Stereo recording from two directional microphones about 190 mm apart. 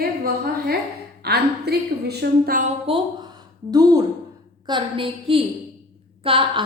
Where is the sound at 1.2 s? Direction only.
60° right (ahead or behind).